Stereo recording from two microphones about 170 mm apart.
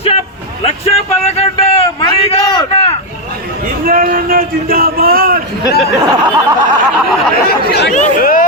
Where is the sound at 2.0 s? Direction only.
25° left (ahead or behind).